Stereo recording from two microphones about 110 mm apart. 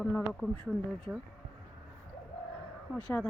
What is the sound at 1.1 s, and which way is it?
Speech, 5° right (ahead or behind).